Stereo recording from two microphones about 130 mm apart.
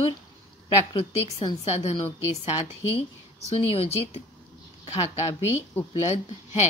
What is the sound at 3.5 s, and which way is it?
Speech, 50° left (ahead or behind).